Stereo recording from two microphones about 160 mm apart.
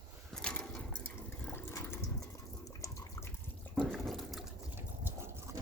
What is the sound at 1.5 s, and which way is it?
Water, 15° left (ahead or behind).